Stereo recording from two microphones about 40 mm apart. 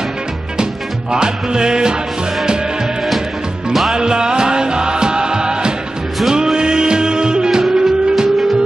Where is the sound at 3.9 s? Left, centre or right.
Centre.